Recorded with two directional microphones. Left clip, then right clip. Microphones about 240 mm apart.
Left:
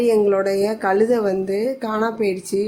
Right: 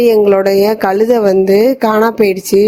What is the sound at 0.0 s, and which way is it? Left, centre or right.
A woman's voice, right.